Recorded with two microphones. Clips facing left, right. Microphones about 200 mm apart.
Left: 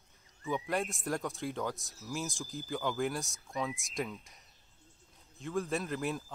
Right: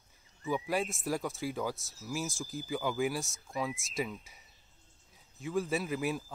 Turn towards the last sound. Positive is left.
turn(degrees=0)  # may be behind; listen again after turning